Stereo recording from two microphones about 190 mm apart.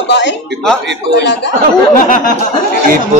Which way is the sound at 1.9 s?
45° left (ahead or behind).